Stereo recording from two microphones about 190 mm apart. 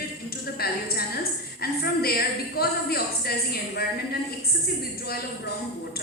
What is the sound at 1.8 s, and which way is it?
A woman's voice, 55° left (ahead or behind).